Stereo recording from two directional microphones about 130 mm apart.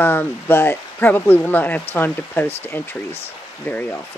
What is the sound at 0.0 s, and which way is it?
Speech, 15° left (ahead or behind).